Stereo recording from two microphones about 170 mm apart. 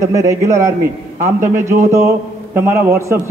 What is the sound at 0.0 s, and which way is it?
A man's voice, 20° right (ahead or behind).